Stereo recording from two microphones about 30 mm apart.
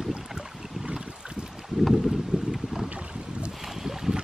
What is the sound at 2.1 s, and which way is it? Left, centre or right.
Boat, centre.